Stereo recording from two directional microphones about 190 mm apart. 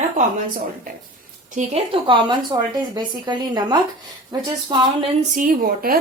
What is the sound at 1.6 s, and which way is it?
Speech, 40° right (ahead or behind).